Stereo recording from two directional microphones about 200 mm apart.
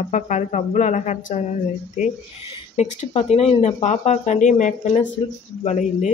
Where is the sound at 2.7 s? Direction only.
35° left (ahead or behind).